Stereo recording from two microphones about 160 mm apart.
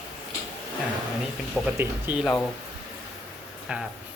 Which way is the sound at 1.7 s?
10° right (ahead or behind).